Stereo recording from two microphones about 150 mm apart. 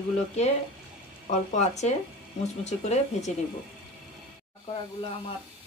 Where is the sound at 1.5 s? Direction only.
50° left (ahead or behind).